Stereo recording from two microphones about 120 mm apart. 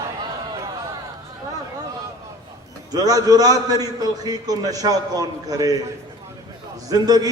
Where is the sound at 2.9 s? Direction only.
30° right (ahead or behind).